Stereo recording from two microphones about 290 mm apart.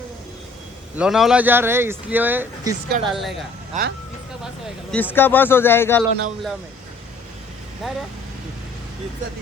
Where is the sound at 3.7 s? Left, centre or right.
Right.